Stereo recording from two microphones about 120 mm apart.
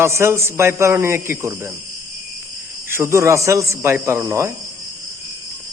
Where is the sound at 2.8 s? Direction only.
20° right (ahead or behind).